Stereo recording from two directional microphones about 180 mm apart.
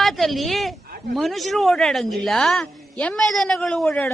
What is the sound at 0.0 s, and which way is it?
A woman's voice, centre (ahead or behind).